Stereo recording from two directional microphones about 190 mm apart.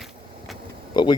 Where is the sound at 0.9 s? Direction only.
25° left (ahead or behind).